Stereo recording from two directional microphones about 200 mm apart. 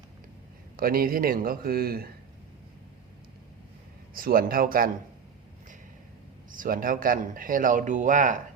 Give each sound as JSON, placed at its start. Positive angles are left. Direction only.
{"t": 0.8, "sound": "speech", "side_deg": -45}
{"t": 4.1, "sound": "speech", "side_deg": -45}
{"t": 6.5, "sound": "speech", "side_deg": -45}